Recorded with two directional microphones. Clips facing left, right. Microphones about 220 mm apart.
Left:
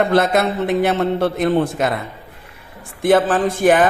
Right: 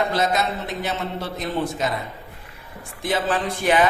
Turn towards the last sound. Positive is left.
turn(degrees=50)  # may be behind; listen again after turning